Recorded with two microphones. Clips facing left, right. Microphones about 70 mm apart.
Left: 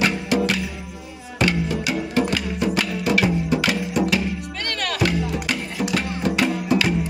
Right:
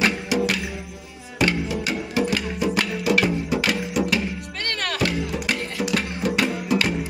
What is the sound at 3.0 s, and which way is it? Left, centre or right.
Music, centre.